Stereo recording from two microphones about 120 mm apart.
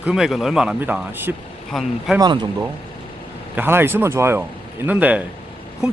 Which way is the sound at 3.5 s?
15° right (ahead or behind).